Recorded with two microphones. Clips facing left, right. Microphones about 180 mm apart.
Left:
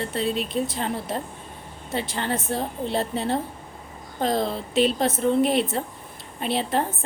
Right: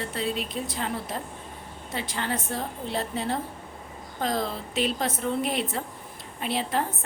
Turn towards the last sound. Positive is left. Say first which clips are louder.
# left 3 dB
turn(degrees=25)  # may be behind; listen again after turning